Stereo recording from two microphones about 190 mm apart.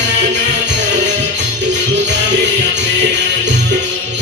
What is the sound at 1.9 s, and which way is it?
Music, 65° right (ahead or behind).